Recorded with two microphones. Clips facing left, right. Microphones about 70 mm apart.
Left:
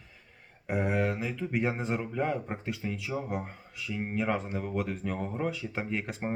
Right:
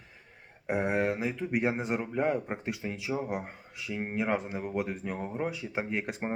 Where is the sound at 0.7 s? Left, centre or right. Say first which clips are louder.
Right 1 dB; right.